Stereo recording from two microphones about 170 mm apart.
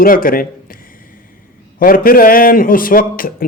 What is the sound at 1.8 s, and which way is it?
A man's voice, 55° left (ahead or behind).